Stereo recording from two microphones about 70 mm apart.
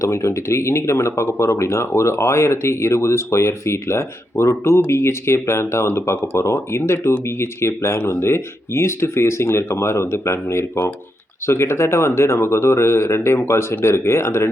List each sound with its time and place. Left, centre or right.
0.0 s speech: left